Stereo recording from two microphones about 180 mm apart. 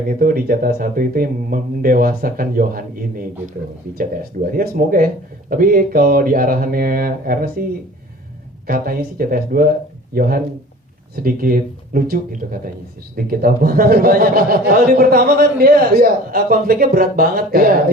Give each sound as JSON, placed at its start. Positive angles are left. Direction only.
{"t": 0.1, "sound": "speech", "side_deg": -50}
{"t": 3.9, "sound": "speech", "side_deg": -55}
{"t": 8.6, "sound": "speech", "side_deg": -50}